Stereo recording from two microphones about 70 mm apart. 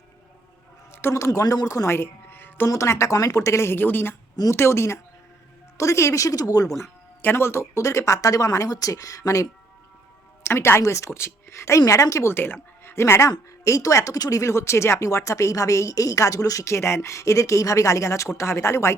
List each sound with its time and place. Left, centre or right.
1.1 s speech: left
1.9 s music: left
2.6 s a woman's voice: left
7.2 s speech: left
10.4 s a woman's voice: left
12.3 s a woman's voice: left